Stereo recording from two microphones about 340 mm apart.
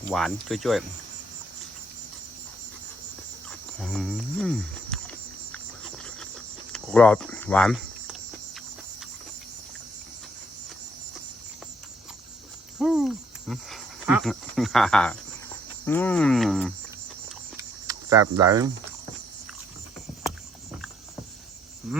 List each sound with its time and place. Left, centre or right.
0.1 s speech: centre
3.8 s speech: centre
6.7 s speech: centre
12.8 s speech: centre
17.6 s typing: centre
21.9 s wild animals: centre